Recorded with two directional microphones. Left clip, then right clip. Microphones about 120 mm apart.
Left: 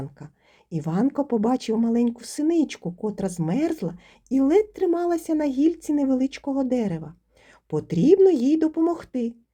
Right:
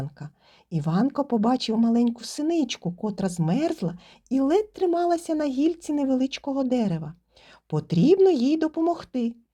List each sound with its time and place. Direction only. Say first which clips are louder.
0.2 s speech: right 1 dB; 25° right (ahead or behind)